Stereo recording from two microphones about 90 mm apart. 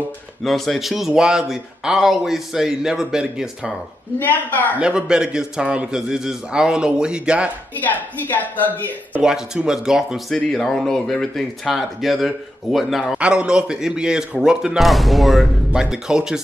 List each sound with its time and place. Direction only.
0.4 s speech: centre (ahead or behind)
4.2 s a woman's voice: 20° left (ahead or behind)
4.7 s a man's voice: 10° right (ahead or behind)
7.7 s a woman's voice: 20° left (ahead or behind)
9.2 s a man's voice: 5° right (ahead or behind)
10.3 s a man's voice: 5° left (ahead or behind)